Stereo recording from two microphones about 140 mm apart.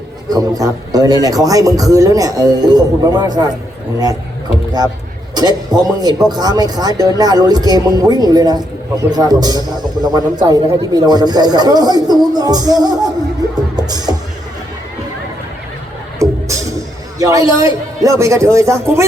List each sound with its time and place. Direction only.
0.3 s a man's voice: 25° right (ahead or behind)
5.8 s a man's voice: 30° right (ahead or behind)
13.7 s music: 30° right (ahead or behind)
16.1 s music: 20° right (ahead or behind)
17.2 s a man's voice: 25° right (ahead or behind)